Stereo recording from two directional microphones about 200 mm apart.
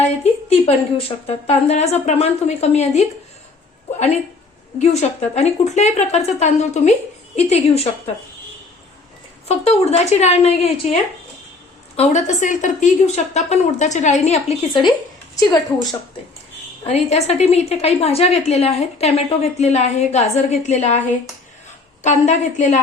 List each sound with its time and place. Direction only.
0.6 s a woman's voice: 30° left (ahead or behind)
4.8 s a woman's voice: 35° left (ahead or behind)
9.5 s a woman's voice: 30° left (ahead or behind)
11.9 s a woman's voice: 35° left (ahead or behind)
16.8 s a woman's voice: 30° left (ahead or behind)
22.0 s a woman's voice: 35° left (ahead or behind)